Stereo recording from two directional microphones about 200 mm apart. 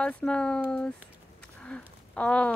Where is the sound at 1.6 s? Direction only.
5° left (ahead or behind).